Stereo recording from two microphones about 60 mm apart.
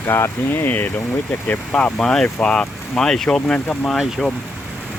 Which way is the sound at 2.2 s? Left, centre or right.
Centre.